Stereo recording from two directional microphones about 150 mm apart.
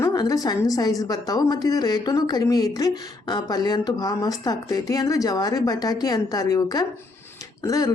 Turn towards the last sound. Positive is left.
turn(degrees=25)  # may be behind; listen again after turning